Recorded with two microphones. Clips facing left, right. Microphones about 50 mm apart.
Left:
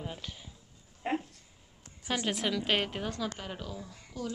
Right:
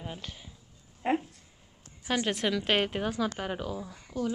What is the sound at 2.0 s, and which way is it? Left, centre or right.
A woman's voice, centre.